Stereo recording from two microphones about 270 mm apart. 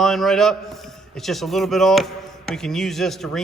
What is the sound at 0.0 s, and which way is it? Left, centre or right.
A man's voice, centre.